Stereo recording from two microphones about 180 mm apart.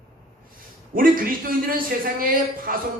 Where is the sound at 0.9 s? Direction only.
50° right (ahead or behind).